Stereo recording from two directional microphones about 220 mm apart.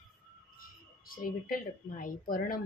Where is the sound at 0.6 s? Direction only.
40° left (ahead or behind).